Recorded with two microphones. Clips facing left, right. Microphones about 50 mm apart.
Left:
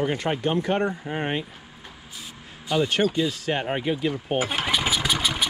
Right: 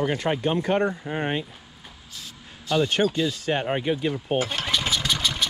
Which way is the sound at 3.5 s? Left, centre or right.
Left.